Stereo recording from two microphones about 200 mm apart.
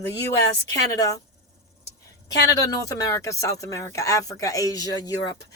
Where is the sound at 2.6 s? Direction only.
15° left (ahead or behind).